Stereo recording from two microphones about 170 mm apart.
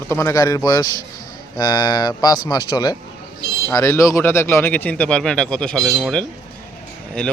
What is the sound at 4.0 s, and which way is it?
A man's voice, 20° left (ahead or behind).